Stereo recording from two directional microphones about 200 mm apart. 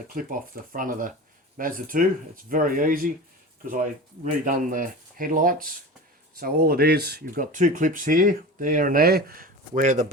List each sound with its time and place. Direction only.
0.1 s speech: 45° right (ahead or behind)
4.4 s speech: 40° right (ahead or behind)